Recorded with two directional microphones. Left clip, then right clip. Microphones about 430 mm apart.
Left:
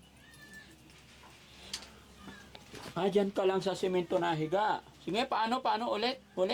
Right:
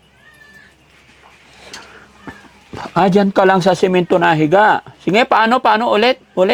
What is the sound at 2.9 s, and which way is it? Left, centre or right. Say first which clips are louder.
Speech: right 18 dB; right.